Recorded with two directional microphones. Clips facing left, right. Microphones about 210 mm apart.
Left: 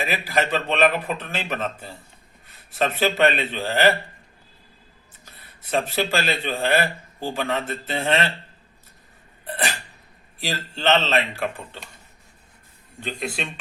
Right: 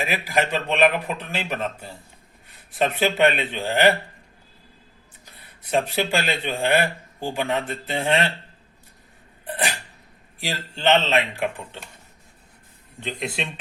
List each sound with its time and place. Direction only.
0.0 s a man's voice: 10° right (ahead or behind)
5.7 s a man's voice: 15° right (ahead or behind)
9.5 s a man's voice: 15° right (ahead or behind)
13.0 s speech: 20° right (ahead or behind)